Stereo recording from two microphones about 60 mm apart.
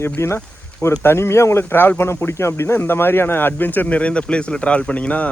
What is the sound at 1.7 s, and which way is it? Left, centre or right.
Speech, left.